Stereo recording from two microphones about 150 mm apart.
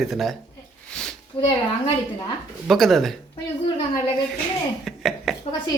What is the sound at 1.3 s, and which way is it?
Speech, 35° left (ahead or behind).